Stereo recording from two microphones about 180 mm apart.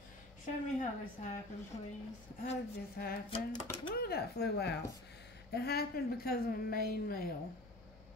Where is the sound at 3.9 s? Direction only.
60° left (ahead or behind).